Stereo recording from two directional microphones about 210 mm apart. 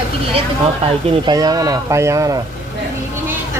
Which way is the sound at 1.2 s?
20° right (ahead or behind).